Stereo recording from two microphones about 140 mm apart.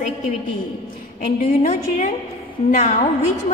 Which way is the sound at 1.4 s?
65° left (ahead or behind).